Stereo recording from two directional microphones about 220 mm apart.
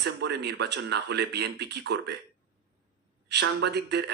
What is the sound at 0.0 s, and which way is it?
Speech, 50° right (ahead or behind).